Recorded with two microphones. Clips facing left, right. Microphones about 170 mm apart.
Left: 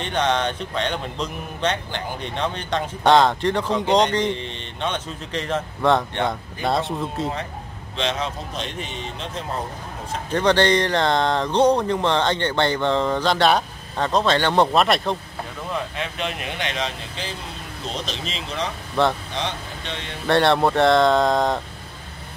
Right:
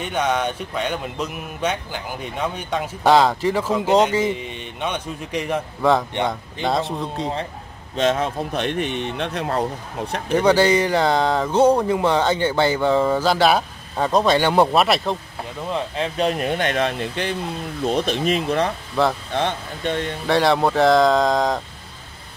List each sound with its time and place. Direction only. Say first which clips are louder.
0.0 s speech: even; 10° right (ahead or behind)
6.2 s speech: right 1 dB; centre (ahead or behind)
7.9 s speech: right 6 dB; 50° right (ahead or behind); by 9.7 s 70° right (ahead or behind)
10.3 s speech: right 2 dB; 10° right (ahead or behind)
15.7 s speech: right 4 dB; 35° right (ahead or behind); by 18.7 s 55° right (ahead or behind)
19.0 s speech: even; 5° right (ahead or behind)
19.3 s speech: right 5 dB; 50° right (ahead or behind)
20.2 s speech: even; centre (ahead or behind)